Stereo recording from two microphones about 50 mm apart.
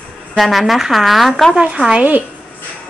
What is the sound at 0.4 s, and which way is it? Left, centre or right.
A woman's voice, centre.